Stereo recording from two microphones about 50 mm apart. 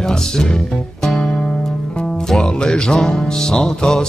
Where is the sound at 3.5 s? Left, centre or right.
Centre.